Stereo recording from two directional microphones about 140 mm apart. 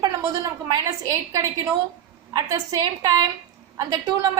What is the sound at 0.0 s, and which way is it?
A woman's voice, 25° right (ahead or behind).